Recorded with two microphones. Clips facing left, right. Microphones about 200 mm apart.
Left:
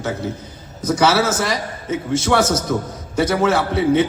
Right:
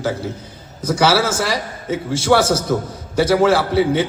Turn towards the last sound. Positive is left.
turn(degrees=-30)  # may be behind; listen again after turning